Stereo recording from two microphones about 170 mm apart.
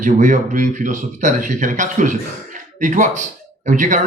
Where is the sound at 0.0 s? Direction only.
45° right (ahead or behind).